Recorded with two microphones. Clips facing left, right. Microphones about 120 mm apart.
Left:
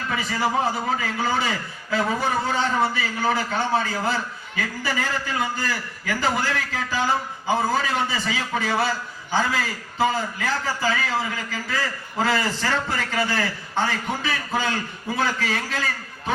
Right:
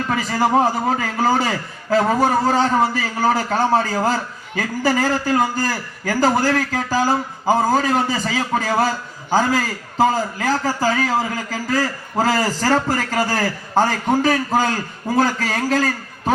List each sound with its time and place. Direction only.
0.1 s a man's voice: 40° right (ahead or behind)